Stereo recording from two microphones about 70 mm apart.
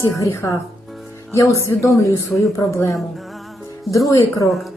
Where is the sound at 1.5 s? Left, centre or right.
Left.